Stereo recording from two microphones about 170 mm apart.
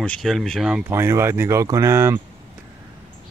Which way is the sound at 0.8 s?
15° right (ahead or behind).